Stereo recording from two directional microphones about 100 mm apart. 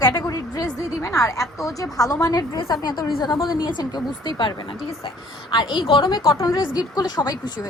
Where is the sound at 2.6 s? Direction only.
50° left (ahead or behind).